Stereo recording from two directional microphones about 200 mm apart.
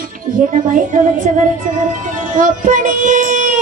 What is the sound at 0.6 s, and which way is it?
Speech, 40° right (ahead or behind).